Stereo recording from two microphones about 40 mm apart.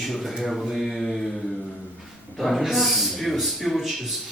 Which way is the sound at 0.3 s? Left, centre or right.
Centre.